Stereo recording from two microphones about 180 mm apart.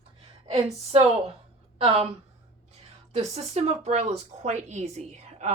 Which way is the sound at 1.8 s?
30° right (ahead or behind).